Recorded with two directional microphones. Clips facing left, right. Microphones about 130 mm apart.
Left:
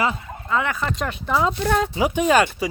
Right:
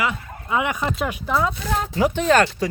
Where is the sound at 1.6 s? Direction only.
90° left.